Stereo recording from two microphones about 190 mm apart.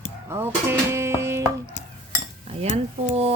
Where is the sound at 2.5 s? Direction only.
35° right (ahead or behind).